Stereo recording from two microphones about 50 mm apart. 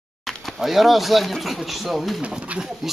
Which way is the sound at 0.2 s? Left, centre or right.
Centre.